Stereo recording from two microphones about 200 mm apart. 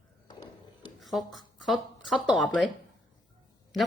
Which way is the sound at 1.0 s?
Centre (ahead or behind).